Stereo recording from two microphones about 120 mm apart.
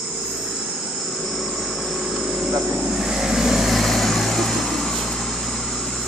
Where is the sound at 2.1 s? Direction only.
Centre (ahead or behind).